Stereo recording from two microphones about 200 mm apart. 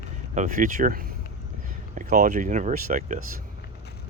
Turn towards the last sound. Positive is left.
turn(degrees=-40)  # may be behind; listen again after turning